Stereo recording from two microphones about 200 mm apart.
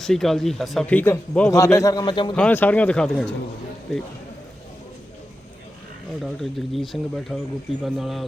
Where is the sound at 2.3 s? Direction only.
5° left (ahead or behind).